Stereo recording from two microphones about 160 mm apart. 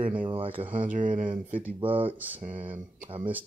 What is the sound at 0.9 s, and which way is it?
Speech, 55° right (ahead or behind).